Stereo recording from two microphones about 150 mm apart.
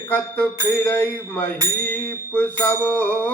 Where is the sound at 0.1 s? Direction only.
10° left (ahead or behind).